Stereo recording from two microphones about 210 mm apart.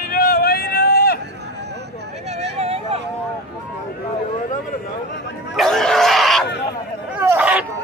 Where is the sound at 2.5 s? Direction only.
30° right (ahead or behind).